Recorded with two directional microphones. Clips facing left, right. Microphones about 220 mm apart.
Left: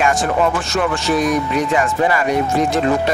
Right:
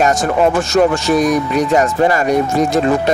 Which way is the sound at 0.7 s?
40° right (ahead or behind).